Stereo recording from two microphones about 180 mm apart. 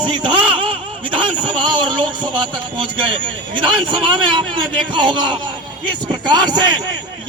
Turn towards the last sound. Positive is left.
turn(degrees=-25)  # may be behind; listen again after turning